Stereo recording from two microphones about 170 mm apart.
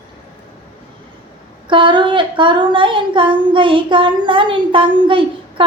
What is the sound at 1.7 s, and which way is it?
Speech, 30° right (ahead or behind).